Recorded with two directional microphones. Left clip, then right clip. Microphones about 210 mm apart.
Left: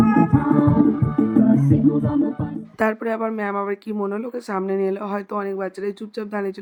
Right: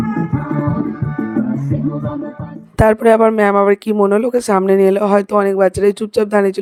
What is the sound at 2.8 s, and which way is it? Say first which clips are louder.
Speech: right 12 dB; 55° right (ahead or behind).